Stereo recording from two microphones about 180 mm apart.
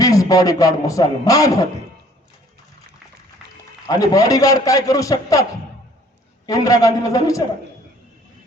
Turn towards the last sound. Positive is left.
turn(degrees=20)  # may be behind; listen again after turning